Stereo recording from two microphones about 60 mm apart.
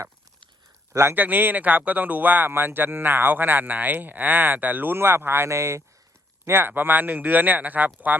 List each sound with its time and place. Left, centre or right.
1.1 s speech: right
5.5 s speech: right
6.4 s speech: right